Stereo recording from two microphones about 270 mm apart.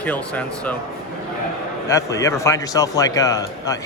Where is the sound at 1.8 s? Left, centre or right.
Centre.